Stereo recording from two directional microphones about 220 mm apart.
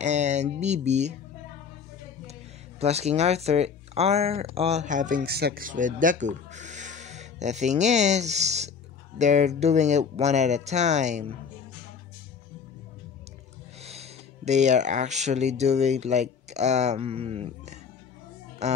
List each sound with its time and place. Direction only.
0.0 s speech: 30° right (ahead or behind)
2.8 s speech: 30° right (ahead or behind)
13.8 s speech: 30° right (ahead or behind)